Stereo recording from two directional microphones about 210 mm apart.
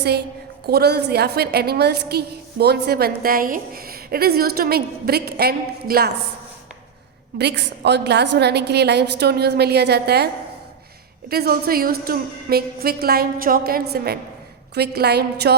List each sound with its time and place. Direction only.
0.7 s a woman's voice: 50° right (ahead or behind)
7.3 s a woman's voice: 50° right (ahead or behind)
11.3 s a woman's voice: 45° right (ahead or behind)